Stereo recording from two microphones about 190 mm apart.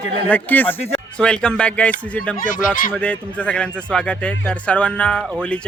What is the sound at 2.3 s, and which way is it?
Speech, 45° left (ahead or behind).